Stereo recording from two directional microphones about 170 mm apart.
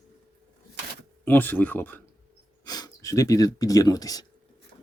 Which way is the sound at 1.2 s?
10° left (ahead or behind).